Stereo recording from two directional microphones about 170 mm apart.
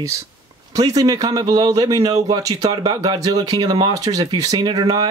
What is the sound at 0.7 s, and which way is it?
A man's voice, 20° right (ahead or behind).